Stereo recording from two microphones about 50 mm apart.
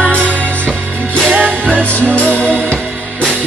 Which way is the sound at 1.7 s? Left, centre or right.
Left.